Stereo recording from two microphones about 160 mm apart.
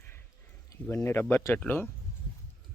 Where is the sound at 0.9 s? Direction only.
15° left (ahead or behind).